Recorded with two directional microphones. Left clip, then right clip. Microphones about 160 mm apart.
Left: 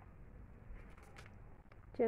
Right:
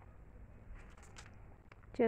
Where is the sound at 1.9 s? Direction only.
30° right (ahead or behind).